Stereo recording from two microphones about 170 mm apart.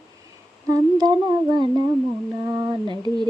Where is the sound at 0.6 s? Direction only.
25° right (ahead or behind).